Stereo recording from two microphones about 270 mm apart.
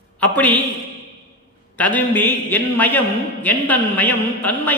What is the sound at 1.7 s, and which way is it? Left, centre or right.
A man's voice, centre.